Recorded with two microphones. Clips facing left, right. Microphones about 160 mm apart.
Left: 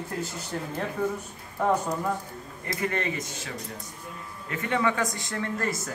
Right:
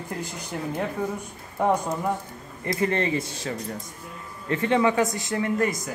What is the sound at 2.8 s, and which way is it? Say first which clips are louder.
Speech: right 5 dB; 30° right (ahead or behind).